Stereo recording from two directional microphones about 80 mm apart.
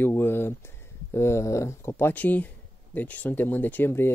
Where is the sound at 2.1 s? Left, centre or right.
Left.